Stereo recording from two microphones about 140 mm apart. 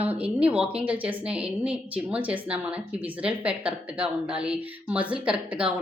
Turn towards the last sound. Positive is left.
turn(degrees=-10)  # may be behind; listen again after turning